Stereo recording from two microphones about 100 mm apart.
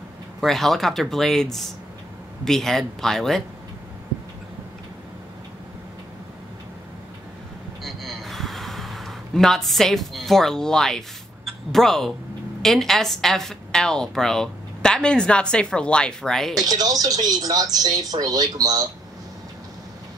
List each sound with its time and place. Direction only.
0.4 s speech: centre (ahead or behind)
7.8 s gasp: centre (ahead or behind)
12.6 s a woman's voice: 5° left (ahead or behind)
16.6 s speech: 40° right (ahead or behind)